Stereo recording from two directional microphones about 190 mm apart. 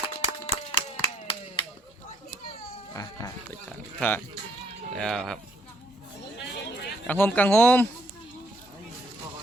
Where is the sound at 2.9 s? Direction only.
15° left (ahead or behind).